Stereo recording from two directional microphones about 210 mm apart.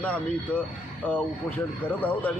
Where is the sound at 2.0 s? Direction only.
10° left (ahead or behind).